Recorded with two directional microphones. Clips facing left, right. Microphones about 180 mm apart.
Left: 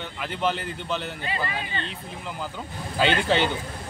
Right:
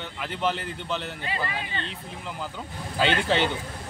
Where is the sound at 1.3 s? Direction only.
30° left (ahead or behind).